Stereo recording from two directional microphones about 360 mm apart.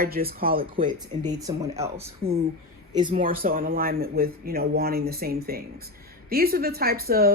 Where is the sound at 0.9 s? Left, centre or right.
Centre.